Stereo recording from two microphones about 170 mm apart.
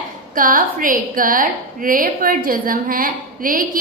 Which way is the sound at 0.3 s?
55° right (ahead or behind).